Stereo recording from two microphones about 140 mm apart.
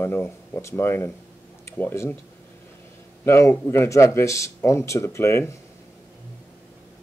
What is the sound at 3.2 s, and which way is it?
Speech, 20° left (ahead or behind).